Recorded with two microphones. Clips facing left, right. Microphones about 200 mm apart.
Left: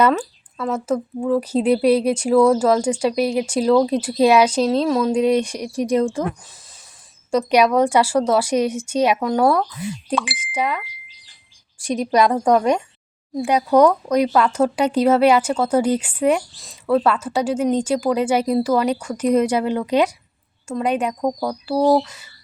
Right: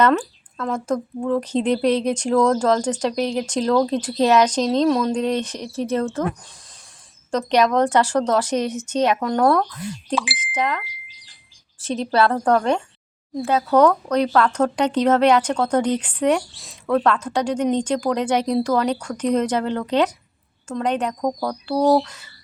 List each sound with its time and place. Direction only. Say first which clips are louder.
0.0 s speech: even; 5° left (ahead or behind)
7.3 s speech: left 2 dB; 10° left (ahead or behind)